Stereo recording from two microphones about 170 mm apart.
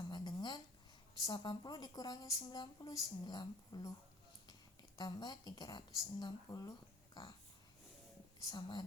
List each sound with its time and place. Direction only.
0.1 s a sound: 25° left (ahead or behind)
1.3 s a woman's voice: 25° left (ahead or behind)
4.9 s a woman's voice: 25° left (ahead or behind)
8.4 s a woman's voice: 25° left (ahead or behind)